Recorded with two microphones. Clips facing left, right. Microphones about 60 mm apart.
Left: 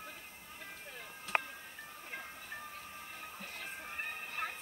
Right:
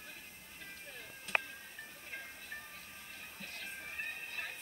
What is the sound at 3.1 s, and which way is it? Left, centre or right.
Music, left.